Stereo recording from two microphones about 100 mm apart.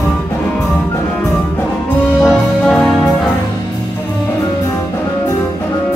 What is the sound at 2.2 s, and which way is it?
Music, 5° left (ahead or behind).